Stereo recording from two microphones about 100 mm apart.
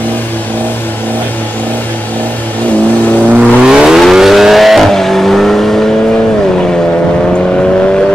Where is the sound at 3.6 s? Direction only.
5° right (ahead or behind); by 7.9 s 10° left (ahead or behind).